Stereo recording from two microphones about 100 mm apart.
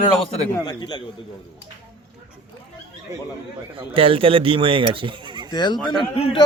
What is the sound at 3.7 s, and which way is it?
Speech, 65° right (ahead or behind).